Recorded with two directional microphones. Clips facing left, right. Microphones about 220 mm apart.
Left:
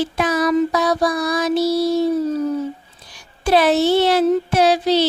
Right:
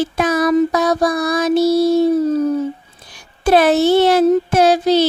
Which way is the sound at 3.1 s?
50° right (ahead or behind).